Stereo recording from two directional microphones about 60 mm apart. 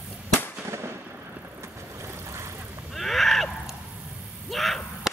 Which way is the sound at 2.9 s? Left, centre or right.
Centre.